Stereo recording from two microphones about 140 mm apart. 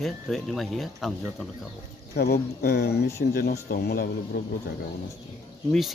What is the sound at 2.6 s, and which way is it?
Speech, 90° left.